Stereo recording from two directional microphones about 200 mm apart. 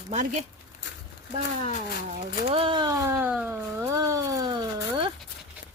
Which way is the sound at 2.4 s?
30° right (ahead or behind).